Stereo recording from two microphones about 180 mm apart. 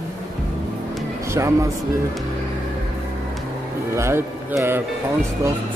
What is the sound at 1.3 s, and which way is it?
Speech, 15° right (ahead or behind).